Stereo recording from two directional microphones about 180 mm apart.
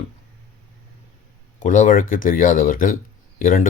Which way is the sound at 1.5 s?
45° left (ahead or behind).